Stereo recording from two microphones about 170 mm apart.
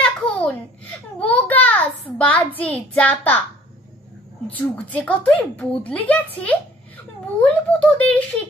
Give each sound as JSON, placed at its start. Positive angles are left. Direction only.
{"t": 0.0, "sound": "a sound", "side_deg": 5}
{"t": 2.1, "sound": "a woman's voice", "side_deg": 10}
{"t": 4.5, "sound": "a woman's voice", "side_deg": 10}